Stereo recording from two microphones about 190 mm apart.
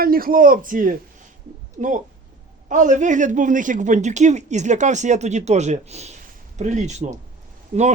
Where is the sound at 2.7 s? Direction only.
40° right (ahead or behind).